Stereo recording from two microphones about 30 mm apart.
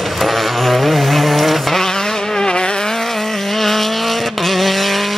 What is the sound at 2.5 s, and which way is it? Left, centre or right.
Vehicle, left.